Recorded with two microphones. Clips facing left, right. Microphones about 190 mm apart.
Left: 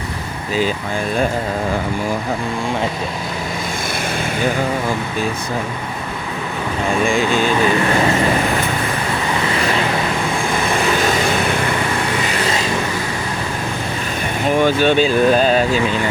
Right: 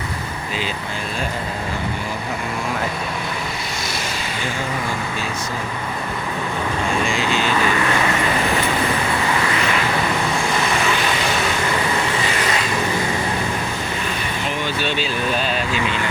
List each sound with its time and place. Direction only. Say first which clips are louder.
7.0 s speech: left 5 dB; 50° left (ahead or behind)
14.4 s speech: left 11 dB; 50° left (ahead or behind)